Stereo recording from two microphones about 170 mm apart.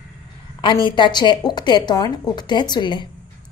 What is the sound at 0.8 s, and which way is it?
A woman's voice, 25° left (ahead or behind).